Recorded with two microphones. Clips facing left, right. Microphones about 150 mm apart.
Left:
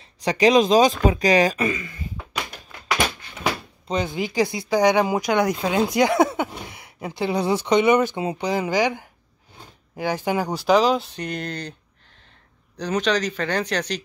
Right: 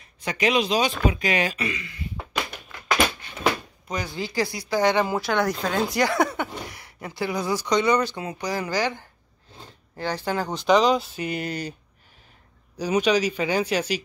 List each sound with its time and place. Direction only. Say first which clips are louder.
0.2 s speech: left 6 dB; 35° left (ahead or behind)
3.8 s speech: left 6 dB; 25° left (ahead or behind); by 11.7 s 5° right (ahead or behind)
12.7 s speech: right 1 dB; 10° right (ahead or behind)